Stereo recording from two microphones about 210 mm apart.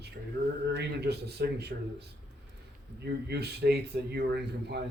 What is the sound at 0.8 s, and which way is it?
Speech, 50° right (ahead or behind).